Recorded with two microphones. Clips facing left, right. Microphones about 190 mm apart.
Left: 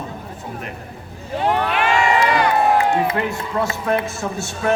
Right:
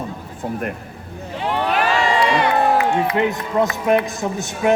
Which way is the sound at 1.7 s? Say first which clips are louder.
Even; 40° right (ahead or behind).